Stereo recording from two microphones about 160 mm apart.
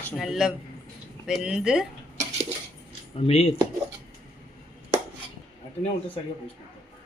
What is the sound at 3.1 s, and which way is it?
Speech, 40° left (ahead or behind).